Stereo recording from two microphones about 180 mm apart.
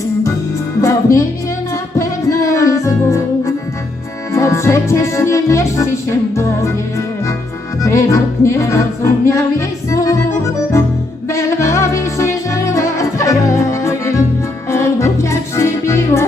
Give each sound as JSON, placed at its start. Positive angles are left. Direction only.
{"t": 0.8, "sound": "music", "side_deg": 15}